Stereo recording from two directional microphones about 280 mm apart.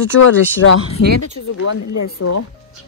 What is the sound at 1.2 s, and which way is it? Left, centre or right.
Speech, left.